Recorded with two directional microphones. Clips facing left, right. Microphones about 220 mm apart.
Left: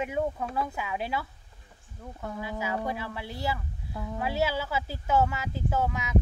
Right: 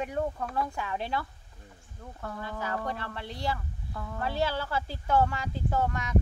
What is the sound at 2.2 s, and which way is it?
Speech, 15° left (ahead or behind).